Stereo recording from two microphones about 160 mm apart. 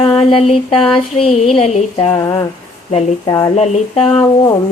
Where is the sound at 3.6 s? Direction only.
35° left (ahead or behind).